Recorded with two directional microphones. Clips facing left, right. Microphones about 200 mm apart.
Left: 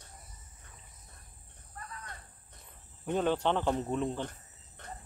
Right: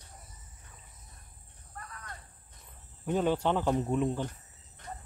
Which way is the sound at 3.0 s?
5° right (ahead or behind).